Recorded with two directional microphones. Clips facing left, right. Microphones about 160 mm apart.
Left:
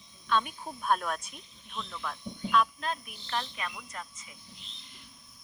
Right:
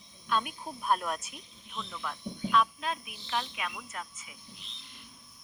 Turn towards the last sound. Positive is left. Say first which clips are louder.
# right 1 dB
turn(degrees=-5)  # may be behind; listen again after turning